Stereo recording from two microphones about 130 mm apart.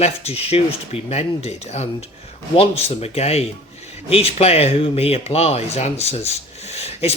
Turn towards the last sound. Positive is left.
turn(degrees=50)  # may be behind; listen again after turning